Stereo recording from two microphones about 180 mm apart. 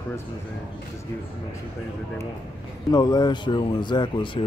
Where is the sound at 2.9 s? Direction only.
25° left (ahead or behind).